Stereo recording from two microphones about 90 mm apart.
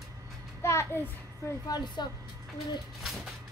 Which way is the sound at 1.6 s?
50° left (ahead or behind).